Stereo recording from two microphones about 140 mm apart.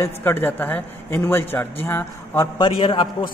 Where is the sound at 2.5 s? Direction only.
35° left (ahead or behind).